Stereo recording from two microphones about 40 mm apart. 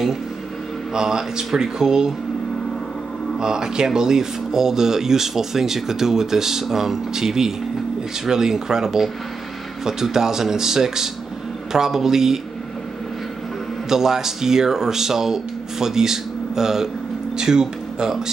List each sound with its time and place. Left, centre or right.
0.9 s speech: centre
3.3 s speech: centre
13.8 s speech: centre